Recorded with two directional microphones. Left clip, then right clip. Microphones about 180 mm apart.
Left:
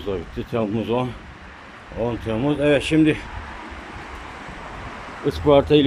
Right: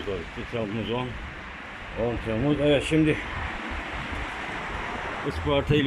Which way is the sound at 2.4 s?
10° left (ahead or behind).